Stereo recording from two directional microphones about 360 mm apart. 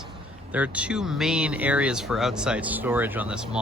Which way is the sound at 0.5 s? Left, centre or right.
Centre.